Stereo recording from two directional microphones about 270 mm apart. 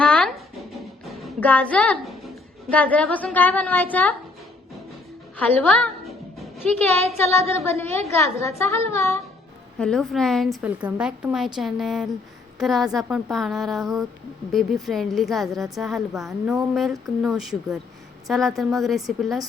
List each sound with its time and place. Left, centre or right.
0.0 s music: centre
2.7 s a woman's voice: centre
5.4 s music: centre
7.2 s a woman's voice: centre